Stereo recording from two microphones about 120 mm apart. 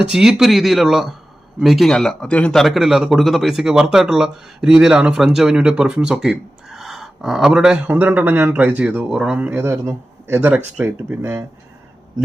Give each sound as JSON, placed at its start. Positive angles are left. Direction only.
{"t": 0.0, "sound": "speech", "side_deg": -5}